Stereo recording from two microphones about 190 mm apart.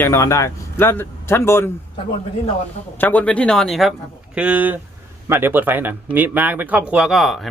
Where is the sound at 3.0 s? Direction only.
10° left (ahead or behind).